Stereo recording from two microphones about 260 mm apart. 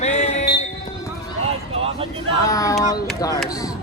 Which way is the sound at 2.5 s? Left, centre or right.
Centre.